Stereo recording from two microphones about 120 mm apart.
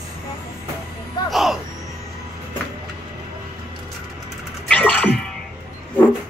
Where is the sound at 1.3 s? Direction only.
Centre (ahead or behind).